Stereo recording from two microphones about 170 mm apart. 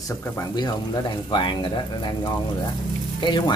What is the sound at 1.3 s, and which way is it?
Speech, 25° left (ahead or behind).